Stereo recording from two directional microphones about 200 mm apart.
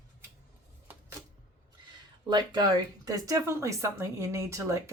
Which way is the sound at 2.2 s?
20° right (ahead or behind).